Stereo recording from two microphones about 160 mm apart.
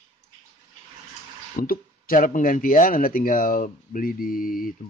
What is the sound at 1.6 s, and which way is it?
Speech, 65° left (ahead or behind).